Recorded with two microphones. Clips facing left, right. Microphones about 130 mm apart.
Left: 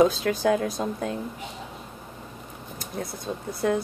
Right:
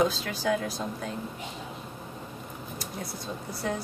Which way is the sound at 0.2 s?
55° left (ahead or behind).